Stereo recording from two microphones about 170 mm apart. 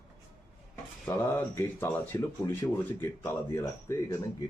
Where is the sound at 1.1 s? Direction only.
15° left (ahead or behind).